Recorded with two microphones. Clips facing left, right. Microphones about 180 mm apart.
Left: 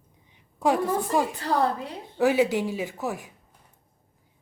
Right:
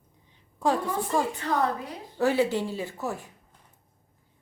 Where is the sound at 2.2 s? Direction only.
15° left (ahead or behind).